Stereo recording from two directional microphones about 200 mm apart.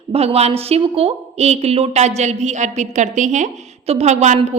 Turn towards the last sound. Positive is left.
turn(degrees=-35)  # may be behind; listen again after turning